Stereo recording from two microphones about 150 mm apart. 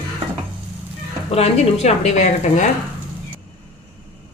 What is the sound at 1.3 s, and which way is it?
A woman's voice, 45° left (ahead or behind).